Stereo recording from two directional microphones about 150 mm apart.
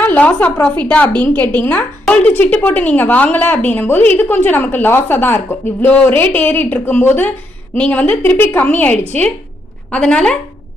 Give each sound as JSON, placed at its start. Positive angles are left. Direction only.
{"t": 0.0, "sound": "a woman's voice", "side_deg": 10}